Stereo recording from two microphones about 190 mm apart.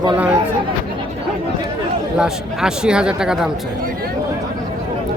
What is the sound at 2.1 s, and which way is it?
Speech, 5° right (ahead or behind).